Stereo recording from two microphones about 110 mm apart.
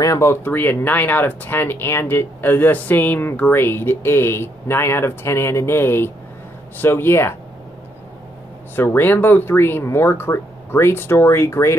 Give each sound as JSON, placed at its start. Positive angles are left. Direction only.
{"t": 0.0, "sound": "speech", "side_deg": 30}
{"t": 8.7, "sound": "speech", "side_deg": 20}